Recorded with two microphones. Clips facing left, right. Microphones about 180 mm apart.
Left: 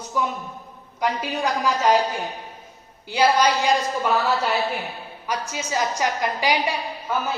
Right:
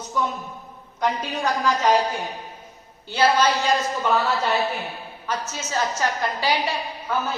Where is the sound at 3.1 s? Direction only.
15° left (ahead or behind).